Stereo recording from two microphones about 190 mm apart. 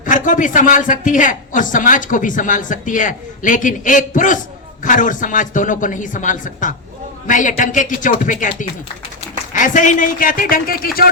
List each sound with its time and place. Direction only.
0.0 s a man's voice: 45° left (ahead or behind)